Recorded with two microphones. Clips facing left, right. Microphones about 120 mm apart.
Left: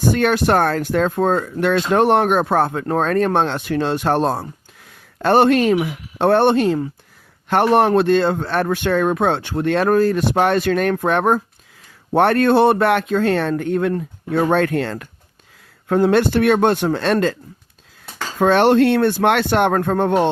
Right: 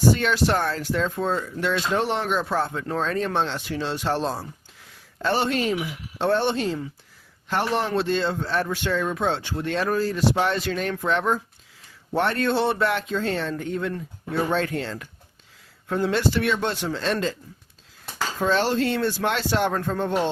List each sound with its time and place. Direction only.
0.1 s speech: 55° left (ahead or behind)
18.3 s speech: 65° left (ahead or behind)